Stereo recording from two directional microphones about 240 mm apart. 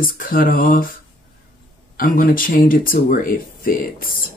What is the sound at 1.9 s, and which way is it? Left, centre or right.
Speech, left.